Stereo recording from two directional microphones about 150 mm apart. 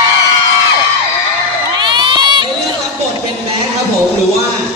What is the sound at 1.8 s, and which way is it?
Crowd, 30° right (ahead or behind).